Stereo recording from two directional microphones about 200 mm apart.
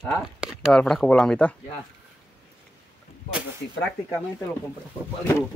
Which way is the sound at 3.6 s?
60° left (ahead or behind).